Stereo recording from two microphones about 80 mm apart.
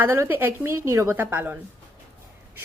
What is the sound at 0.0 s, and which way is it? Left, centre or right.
A woman's voice, right.